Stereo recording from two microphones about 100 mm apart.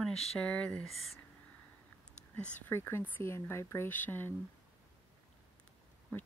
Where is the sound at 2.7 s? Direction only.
25° left (ahead or behind).